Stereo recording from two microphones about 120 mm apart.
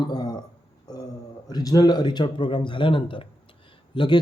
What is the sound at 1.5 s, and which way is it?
Speech, 35° left (ahead or behind).